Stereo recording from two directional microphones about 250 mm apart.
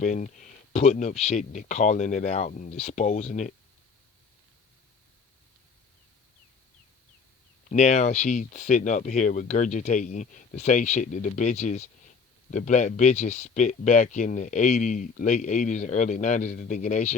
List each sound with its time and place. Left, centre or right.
0.0 s speech: left
7.7 s speech: left